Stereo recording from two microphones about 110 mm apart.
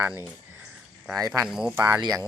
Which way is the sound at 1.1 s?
30° right (ahead or behind).